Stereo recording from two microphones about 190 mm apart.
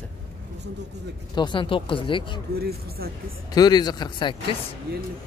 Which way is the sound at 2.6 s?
55° right (ahead or behind).